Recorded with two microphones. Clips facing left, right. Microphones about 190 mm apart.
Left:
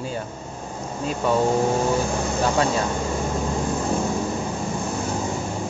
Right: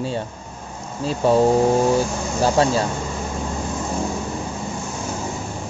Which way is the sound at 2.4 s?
30° right (ahead or behind).